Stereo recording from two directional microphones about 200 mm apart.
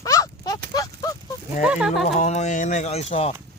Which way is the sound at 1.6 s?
5° right (ahead or behind).